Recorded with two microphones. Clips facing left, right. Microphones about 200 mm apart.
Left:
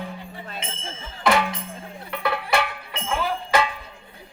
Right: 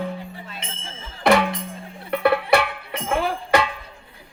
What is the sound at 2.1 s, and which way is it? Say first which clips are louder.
Music: right 7 dB; 60° right (ahead or behind).